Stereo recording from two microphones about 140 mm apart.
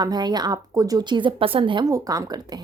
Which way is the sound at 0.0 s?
30° right (ahead or behind).